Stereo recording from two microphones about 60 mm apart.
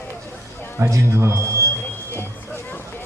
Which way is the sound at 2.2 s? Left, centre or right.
Left.